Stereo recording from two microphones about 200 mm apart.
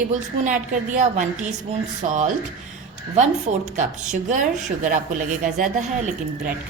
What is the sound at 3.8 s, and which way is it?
A woman's voice, 35° right (ahead or behind).